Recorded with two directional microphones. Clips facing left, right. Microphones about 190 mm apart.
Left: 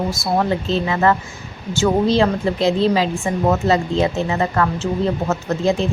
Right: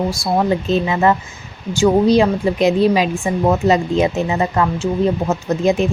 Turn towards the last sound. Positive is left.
turn(degrees=-15)  # may be behind; listen again after turning